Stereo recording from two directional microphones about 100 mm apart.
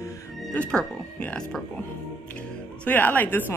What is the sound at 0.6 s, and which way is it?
Speech, 10° left (ahead or behind).